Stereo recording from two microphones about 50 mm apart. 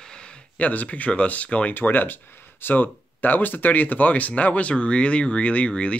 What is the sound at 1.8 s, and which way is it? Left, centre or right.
Speech, left.